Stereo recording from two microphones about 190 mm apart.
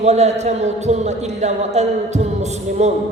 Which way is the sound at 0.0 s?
35° right (ahead or behind).